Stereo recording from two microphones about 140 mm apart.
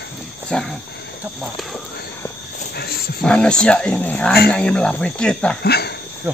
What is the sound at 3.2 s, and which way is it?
Speech, 5° left (ahead or behind).